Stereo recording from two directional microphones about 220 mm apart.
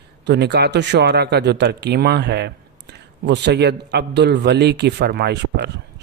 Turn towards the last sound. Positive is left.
turn(degrees=-50)  # may be behind; listen again after turning